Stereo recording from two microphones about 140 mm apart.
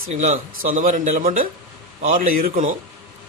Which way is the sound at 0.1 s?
55° right (ahead or behind).